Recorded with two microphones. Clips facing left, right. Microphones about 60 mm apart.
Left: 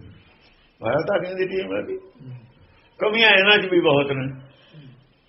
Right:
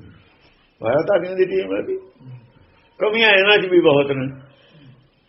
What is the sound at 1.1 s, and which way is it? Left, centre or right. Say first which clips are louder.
Speech: right 6 dB; right.